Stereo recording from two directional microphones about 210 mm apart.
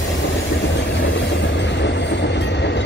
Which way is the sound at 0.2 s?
60° left (ahead or behind).